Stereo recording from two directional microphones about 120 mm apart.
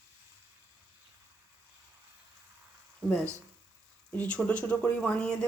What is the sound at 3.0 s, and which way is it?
Speech, 5° left (ahead or behind).